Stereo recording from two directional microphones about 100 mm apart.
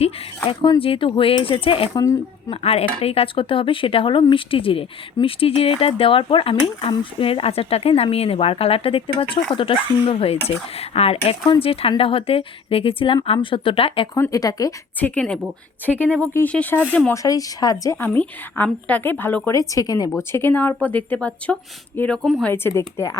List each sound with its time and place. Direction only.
0.4 s speech: 60° left (ahead or behind)
2.5 s speech: 90° left
2.8 s speech: 75° left (ahead or behind)
10.8 s speech: 90° left
11.6 s speech: 70° left (ahead or behind)
14.3 s speech: 35° left (ahead or behind)
14.9 s speech: 15° left (ahead or behind)
17.2 s speech: 35° left (ahead or behind)
18.0 s a woman's voice: 20° left (ahead or behind)
19.5 s a woman's voice: 35° left (ahead or behind); by 22.2 s 10° left (ahead or behind)
22.2 s speech: centre (ahead or behind)
22.4 s a woman's voice: 25° left (ahead or behind)